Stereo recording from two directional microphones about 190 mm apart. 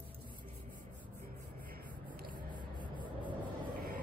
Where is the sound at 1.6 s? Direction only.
45° right (ahead or behind).